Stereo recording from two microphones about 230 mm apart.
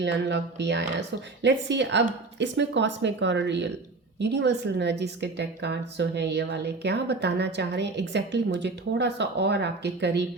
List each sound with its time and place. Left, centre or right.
0.0 s a woman's voice: right